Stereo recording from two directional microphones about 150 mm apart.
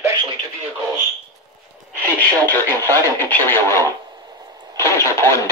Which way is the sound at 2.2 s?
15° left (ahead or behind).